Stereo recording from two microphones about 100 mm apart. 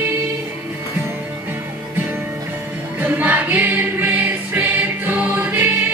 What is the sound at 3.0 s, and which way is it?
Music, 15° right (ahead or behind).